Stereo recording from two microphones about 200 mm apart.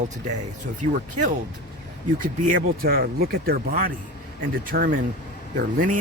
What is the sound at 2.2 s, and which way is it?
Speech, 45° right (ahead or behind).